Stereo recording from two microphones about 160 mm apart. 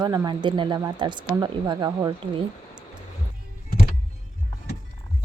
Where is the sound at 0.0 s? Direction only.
25° right (ahead or behind).